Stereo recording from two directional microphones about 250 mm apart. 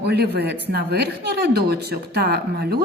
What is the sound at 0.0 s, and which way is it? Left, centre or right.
Speech, right.